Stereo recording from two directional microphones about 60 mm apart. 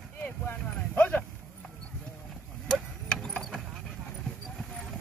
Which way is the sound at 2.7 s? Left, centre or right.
Centre.